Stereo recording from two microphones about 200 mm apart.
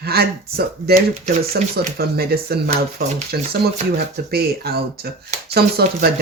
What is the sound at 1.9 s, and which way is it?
Speech, 50° right (ahead or behind).